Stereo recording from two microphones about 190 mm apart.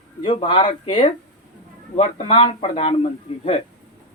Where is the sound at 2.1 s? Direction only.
30° left (ahead or behind).